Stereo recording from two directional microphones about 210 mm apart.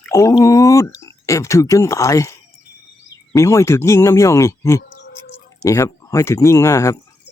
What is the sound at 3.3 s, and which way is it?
Speech, 15° left (ahead or behind).